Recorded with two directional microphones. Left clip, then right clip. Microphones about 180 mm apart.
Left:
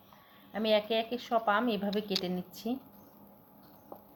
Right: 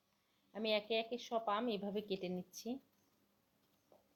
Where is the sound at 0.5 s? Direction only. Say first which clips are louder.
Left 9 dB; 35° right (ahead or behind).